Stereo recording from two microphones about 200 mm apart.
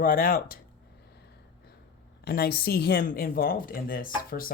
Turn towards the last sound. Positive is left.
turn(degrees=45)  # may be behind; listen again after turning